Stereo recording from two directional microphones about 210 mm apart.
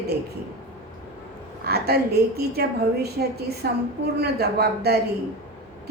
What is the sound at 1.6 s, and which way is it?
A woman's voice, 50° right (ahead or behind).